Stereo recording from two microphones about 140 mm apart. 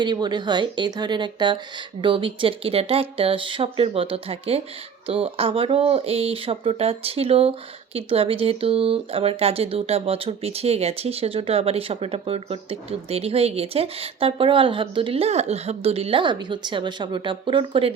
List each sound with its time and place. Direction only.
0.0 s speech: 30° right (ahead or behind)